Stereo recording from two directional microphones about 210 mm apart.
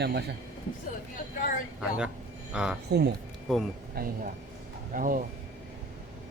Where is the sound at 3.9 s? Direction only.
45° right (ahead or behind).